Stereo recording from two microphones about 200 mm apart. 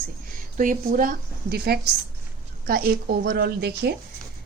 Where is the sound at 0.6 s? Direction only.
40° right (ahead or behind).